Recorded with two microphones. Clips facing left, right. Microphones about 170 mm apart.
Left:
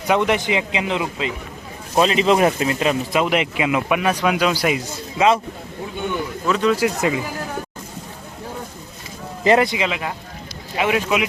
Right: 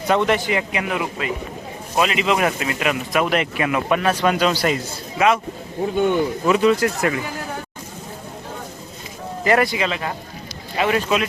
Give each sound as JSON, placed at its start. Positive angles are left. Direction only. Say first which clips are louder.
{"t": 0.1, "sound": "speech", "louder": "even", "side_deg": 15}
{"t": 2.0, "sound": "speech", "louder": "left 4 dB", "side_deg": 35}
{"t": 3.2, "sound": "a man's voice", "louder": "left 1 dB", "side_deg": 15}
{"t": 5.1, "sound": "speech", "louder": "left 1 dB", "side_deg": 25}
{"t": 6.4, "sound": "speech", "louder": "right 2 dB", "side_deg": -10}
{"t": 6.7, "sound": "a man's voice", "louder": "left 1 dB", "side_deg": 10}
{"t": 6.9, "sound": "speech", "louder": "left 1 dB", "side_deg": 20}
{"t": 9.4, "sound": "a man's voice", "louder": "left 2 dB", "side_deg": 20}